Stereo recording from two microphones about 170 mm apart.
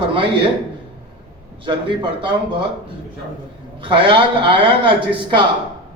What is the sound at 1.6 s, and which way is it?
Speech, 30° right (ahead or behind).